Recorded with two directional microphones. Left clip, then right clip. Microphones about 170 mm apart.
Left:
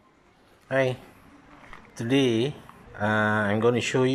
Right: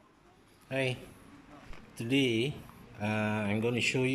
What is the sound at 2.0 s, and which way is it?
Speech, 5° right (ahead or behind).